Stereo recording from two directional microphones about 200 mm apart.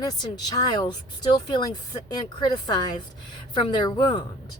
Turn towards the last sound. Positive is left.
turn(degrees=20)  # may be behind; listen again after turning